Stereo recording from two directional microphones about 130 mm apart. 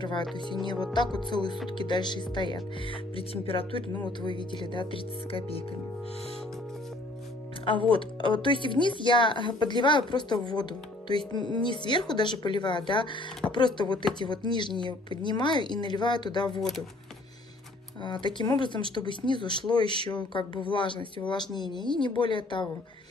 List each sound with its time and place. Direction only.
0.0 s speech: 35° left (ahead or behind)
7.9 s speech: 40° left (ahead or behind)
18.0 s speech: 35° left (ahead or behind)